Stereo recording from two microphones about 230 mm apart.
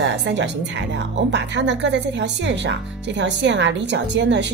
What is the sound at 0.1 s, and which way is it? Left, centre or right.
Speech, right.